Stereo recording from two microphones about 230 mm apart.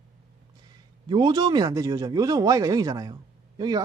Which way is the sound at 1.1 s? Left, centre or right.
Centre.